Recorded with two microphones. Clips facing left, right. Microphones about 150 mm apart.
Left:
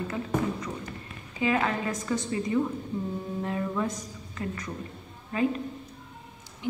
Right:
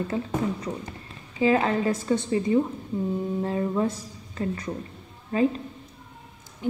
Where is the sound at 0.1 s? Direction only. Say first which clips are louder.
Right 2 dB; 30° right (ahead or behind).